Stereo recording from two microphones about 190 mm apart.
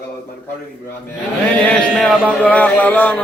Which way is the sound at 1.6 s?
5° left (ahead or behind).